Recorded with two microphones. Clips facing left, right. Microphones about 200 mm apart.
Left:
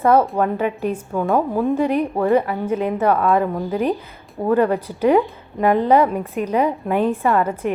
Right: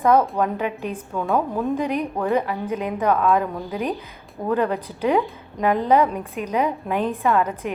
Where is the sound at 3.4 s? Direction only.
55° left (ahead or behind).